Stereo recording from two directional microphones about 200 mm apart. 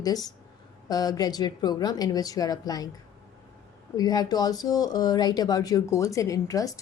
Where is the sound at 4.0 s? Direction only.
20° left (ahead or behind).